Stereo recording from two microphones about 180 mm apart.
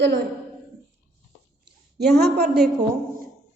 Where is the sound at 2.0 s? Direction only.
65° right (ahead or behind).